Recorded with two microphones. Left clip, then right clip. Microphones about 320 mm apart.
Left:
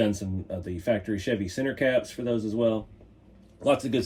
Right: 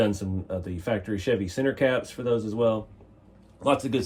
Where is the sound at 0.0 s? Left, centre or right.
Centre.